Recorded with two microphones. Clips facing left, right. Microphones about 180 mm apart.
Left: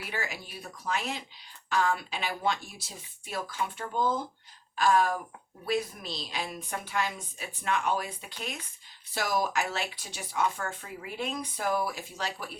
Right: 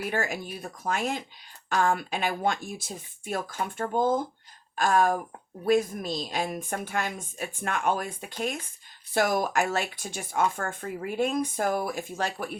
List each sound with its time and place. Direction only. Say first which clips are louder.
0.0 s speech: right 7 dB; 50° right (ahead or behind)